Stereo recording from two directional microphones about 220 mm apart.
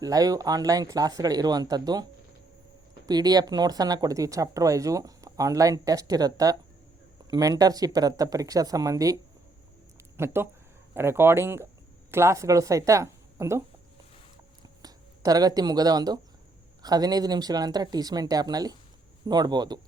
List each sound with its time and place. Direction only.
0.0 s speech: 15° right (ahead or behind)
3.1 s speech: 20° right (ahead or behind)
10.2 s speech: 10° right (ahead or behind)
14.8 s speech: 15° right (ahead or behind)